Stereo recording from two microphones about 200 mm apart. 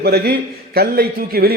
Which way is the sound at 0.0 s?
55° right (ahead or behind).